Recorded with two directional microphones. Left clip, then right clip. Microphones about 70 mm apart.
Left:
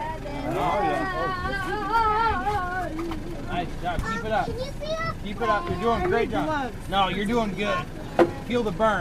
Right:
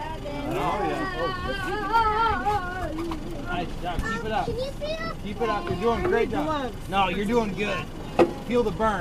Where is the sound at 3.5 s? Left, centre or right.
Left.